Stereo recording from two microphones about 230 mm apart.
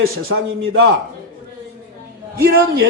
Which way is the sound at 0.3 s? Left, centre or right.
Right.